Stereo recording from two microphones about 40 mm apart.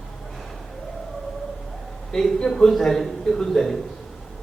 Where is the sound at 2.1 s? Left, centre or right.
Centre.